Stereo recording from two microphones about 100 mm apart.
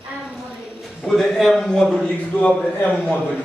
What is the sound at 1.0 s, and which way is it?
A man's voice, centre (ahead or behind).